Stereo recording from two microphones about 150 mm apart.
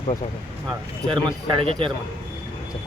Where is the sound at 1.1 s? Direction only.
35° right (ahead or behind).